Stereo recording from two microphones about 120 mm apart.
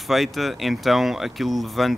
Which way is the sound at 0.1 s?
Centre (ahead or behind).